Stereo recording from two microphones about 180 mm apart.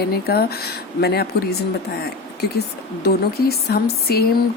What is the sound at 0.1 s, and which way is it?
Speech, 60° left (ahead or behind).